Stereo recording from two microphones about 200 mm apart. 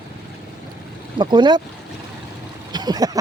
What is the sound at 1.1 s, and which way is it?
Speech, 25° right (ahead or behind).